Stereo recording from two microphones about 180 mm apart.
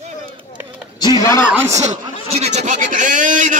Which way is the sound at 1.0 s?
20° left (ahead or behind).